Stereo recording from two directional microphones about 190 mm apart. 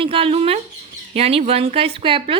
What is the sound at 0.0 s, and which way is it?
Speech, 30° right (ahead or behind).